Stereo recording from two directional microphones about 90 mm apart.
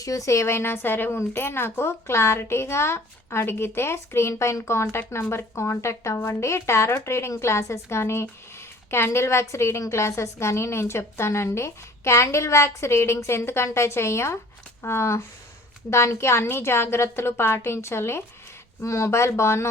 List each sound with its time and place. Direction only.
0.0 s a woman's voice: 40° left (ahead or behind)